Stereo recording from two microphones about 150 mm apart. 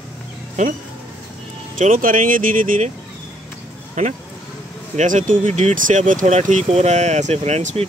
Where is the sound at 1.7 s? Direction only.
60° right (ahead or behind).